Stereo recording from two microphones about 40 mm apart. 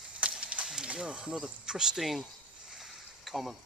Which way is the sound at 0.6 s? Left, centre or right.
Centre.